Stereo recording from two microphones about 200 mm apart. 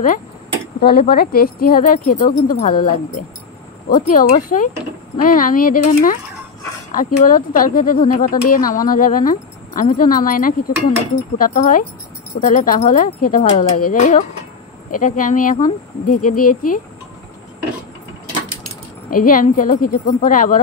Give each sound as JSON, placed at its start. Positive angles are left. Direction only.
{"t": 0.7, "sound": "speech", "side_deg": 50}
{"t": 19.0, "sound": "speech", "side_deg": 45}